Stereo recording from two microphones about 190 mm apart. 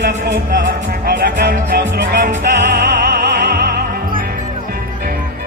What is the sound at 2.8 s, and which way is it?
Music, 55° right (ahead or behind).